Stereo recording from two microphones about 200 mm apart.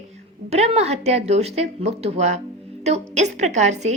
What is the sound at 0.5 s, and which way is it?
A woman's voice, 30° right (ahead or behind).